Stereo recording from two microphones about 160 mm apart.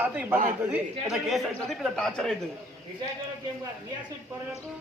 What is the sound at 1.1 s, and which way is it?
Speech, centre (ahead or behind).